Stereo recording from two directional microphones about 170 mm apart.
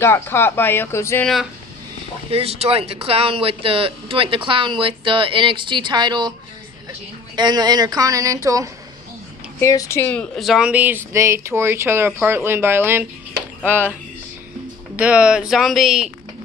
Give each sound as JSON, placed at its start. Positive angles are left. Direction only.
{"t": 0.0, "sound": "speech", "side_deg": 15}
{"t": 1.2, "sound": "speech", "side_deg": 0}
{"t": 2.3, "sound": "speech", "side_deg": -35}
{"t": 7.3, "sound": "speech", "side_deg": -25}
{"t": 9.6, "sound": "speech", "side_deg": 15}
{"t": 15.0, "sound": "speech", "side_deg": -10}